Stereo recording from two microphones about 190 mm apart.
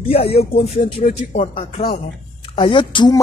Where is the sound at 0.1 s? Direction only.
30° left (ahead or behind).